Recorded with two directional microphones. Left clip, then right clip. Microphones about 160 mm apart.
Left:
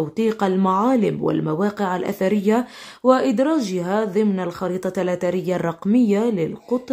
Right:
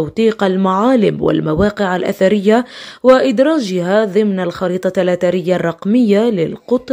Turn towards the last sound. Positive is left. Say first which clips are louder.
# right 7 dB
turn(degrees=-25)  # may be behind; listen again after turning